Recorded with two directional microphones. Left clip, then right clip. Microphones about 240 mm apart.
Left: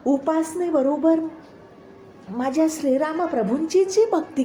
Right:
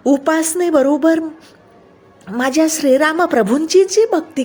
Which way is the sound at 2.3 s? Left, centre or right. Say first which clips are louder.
Right 7 dB; right.